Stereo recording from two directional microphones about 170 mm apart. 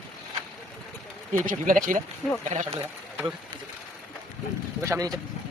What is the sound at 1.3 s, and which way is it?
Speech, 55° right (ahead or behind).